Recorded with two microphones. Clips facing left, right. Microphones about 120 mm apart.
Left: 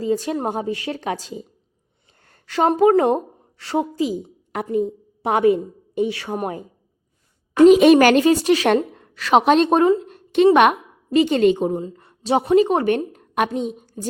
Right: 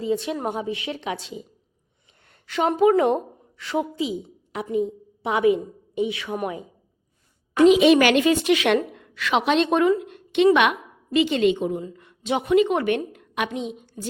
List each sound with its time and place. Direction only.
0.0 s a woman's voice: 40° left (ahead or behind)